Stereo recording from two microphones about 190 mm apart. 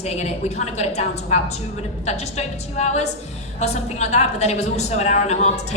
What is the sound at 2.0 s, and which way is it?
A woman's voice, 35° left (ahead or behind).